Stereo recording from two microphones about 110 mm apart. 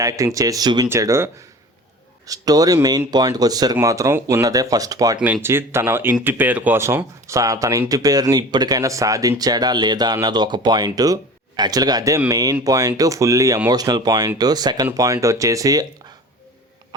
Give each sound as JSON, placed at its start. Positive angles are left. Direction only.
{"t": 0.0, "sound": "speech", "side_deg": -30}
{"t": 5.2, "sound": "speech", "side_deg": -20}